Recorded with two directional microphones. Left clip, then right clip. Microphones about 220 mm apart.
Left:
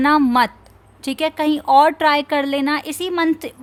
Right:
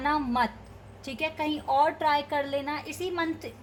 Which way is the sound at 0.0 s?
40° left (ahead or behind).